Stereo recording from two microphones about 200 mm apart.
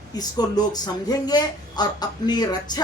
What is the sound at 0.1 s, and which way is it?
Speech, 20° left (ahead or behind).